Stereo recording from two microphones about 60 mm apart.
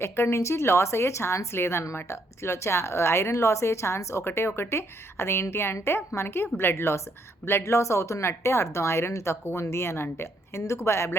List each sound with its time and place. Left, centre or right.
0.0 s speech: left